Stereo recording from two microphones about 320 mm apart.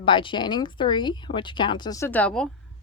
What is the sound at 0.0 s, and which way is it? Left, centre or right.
Speech, centre.